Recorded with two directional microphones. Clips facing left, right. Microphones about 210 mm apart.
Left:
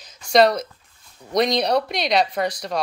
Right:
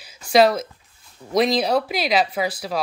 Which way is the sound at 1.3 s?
5° right (ahead or behind).